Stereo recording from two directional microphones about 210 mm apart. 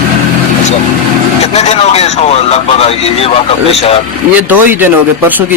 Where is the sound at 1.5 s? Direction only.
30° left (ahead or behind).